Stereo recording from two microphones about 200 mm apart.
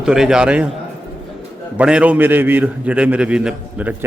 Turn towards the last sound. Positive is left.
turn(degrees=-10)  # may be behind; listen again after turning